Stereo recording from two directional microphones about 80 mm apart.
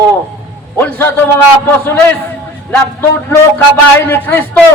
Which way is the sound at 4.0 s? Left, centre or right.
Left.